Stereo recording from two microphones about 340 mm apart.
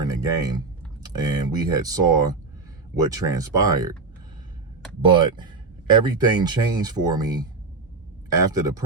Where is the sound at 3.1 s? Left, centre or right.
Centre.